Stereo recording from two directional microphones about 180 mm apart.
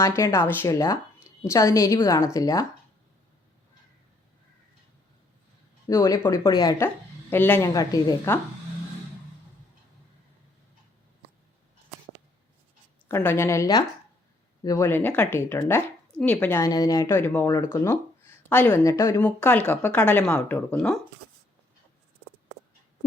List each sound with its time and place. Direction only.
0.0 s a woman's voice: 15° left (ahead or behind)
5.9 s speech: 15° left (ahead or behind)
13.1 s speech: 15° left (ahead or behind)